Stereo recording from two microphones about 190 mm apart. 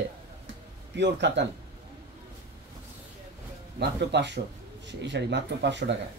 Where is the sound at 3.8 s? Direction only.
65° right (ahead or behind).